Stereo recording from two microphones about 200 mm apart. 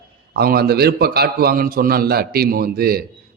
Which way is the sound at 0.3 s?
50° right (ahead or behind).